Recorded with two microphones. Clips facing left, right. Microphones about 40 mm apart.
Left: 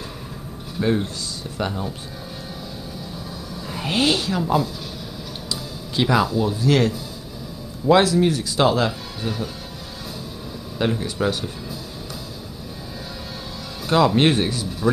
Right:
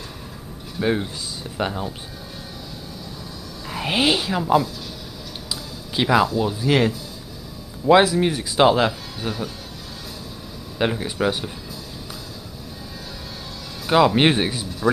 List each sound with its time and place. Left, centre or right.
0.8 s speech: centre
3.6 s speech: centre
5.5 s a sound: centre
6.6 s speech: centre
10.8 s speech: centre
13.8 s speech: centre